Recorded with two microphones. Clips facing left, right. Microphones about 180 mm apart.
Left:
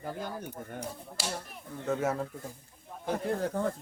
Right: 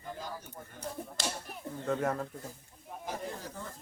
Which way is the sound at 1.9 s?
5° left (ahead or behind).